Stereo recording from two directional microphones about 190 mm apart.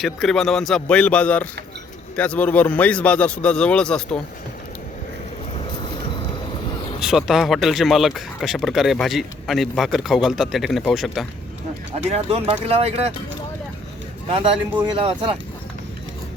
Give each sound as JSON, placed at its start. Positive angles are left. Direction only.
{"t": 0.0, "sound": "speech", "side_deg": 0}
{"t": 7.0, "sound": "speech", "side_deg": 0}
{"t": 12.1, "sound": "speech", "side_deg": -30}
{"t": 14.3, "sound": "speech", "side_deg": -30}